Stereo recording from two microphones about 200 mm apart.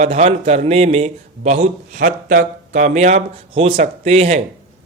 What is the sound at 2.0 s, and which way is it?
A man's voice, 45° right (ahead or behind).